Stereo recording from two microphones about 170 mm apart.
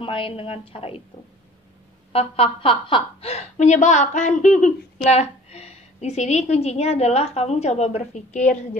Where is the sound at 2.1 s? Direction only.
35° left (ahead or behind).